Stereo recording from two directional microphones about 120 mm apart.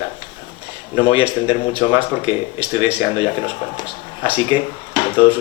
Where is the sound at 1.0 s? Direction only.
50° left (ahead or behind).